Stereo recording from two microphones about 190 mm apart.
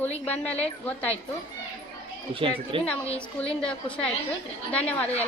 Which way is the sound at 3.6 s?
5° left (ahead or behind).